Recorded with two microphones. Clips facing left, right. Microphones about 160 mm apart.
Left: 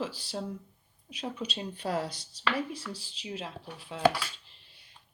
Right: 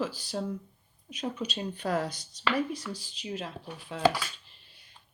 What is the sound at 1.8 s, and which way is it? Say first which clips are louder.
Speech: right 2 dB; 30° left (ahead or behind).